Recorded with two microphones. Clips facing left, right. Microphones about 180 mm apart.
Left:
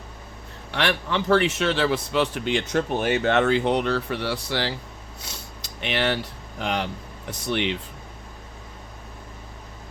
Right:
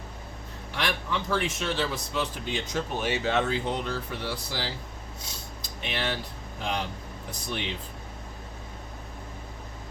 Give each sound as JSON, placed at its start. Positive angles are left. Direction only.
{"t": 0.7, "sound": "a man's voice", "side_deg": 75}
{"t": 5.2, "sound": "cutlery", "side_deg": 70}
{"t": 6.6, "sound": "a man's voice", "side_deg": 70}